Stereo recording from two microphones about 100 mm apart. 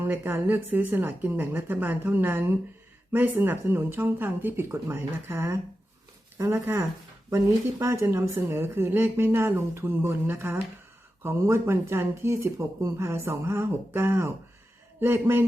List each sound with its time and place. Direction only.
0.0 s speech: 20° right (ahead or behind)